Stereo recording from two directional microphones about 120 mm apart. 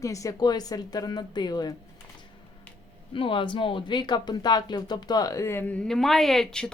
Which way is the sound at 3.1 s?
45° left (ahead or behind).